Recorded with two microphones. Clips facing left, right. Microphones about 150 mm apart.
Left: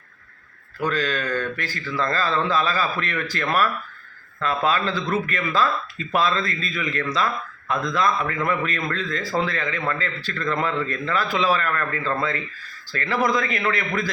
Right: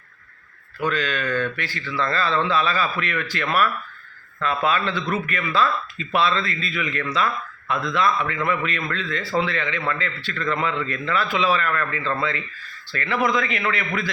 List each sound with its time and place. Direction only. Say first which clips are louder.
0.8 s speech: even; 40° left (ahead or behind)